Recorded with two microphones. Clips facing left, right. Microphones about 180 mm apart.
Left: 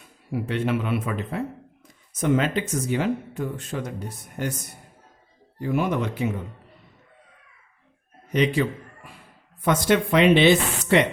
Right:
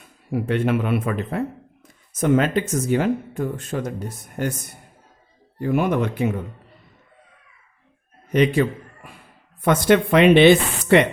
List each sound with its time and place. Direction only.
0.3 s speech: 55° right (ahead or behind)
5.5 s speech: 55° right (ahead or behind)
8.3 s speech: 55° right (ahead or behind)